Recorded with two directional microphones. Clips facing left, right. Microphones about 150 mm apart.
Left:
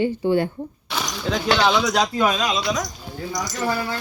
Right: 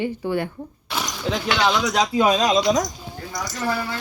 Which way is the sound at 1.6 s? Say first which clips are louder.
Right 1 dB; centre (ahead or behind).